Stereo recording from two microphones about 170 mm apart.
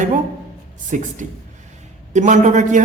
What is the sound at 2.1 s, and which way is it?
Speech, 45° right (ahead or behind).